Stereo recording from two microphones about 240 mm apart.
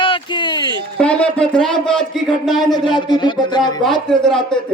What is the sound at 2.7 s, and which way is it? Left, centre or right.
Speech, centre.